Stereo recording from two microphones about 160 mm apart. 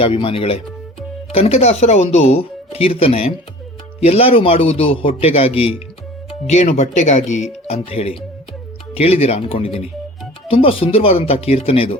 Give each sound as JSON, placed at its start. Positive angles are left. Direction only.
{"t": 0.0, "sound": "speech", "side_deg": 35}